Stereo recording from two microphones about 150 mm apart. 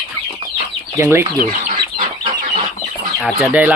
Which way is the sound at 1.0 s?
15° right (ahead or behind).